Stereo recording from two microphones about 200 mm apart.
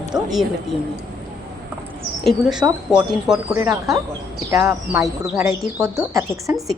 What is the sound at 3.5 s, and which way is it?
Speech, 15° right (ahead or behind).